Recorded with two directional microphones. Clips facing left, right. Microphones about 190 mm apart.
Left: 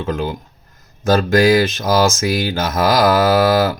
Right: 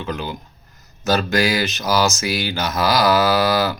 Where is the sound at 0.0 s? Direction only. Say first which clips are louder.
Left 5 dB; 50° left (ahead or behind).